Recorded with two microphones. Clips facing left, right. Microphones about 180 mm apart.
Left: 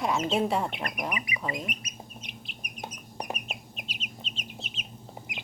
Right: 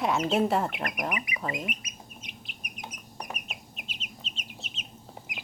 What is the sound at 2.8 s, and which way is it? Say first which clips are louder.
Chicken: left 4 dB; 35° left (ahead or behind).